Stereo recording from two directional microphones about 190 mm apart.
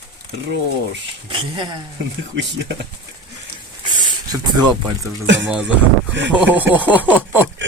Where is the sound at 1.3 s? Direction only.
25° right (ahead or behind).